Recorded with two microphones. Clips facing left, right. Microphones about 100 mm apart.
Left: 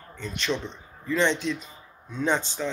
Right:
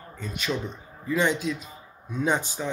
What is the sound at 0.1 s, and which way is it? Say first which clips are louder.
A man's voice: left 1 dB; 5° right (ahead or behind).